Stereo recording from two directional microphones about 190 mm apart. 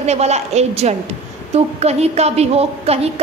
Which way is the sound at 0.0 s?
35° right (ahead or behind).